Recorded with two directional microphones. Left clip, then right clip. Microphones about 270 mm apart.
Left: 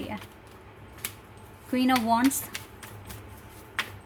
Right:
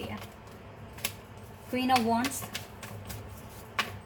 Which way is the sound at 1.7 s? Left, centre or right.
Left.